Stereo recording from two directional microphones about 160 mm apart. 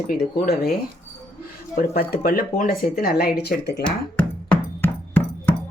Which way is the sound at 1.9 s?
65° left (ahead or behind).